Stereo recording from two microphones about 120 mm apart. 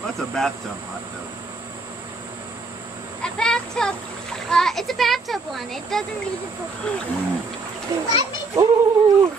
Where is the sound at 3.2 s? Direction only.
5° left (ahead or behind).